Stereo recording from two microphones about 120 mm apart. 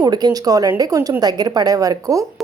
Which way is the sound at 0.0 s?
35° right (ahead or behind).